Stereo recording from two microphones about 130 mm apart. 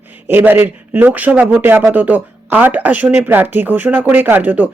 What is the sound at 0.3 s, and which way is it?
Speech, 15° right (ahead or behind).